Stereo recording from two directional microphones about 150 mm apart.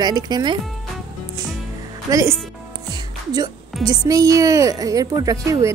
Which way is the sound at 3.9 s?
25° right (ahead or behind).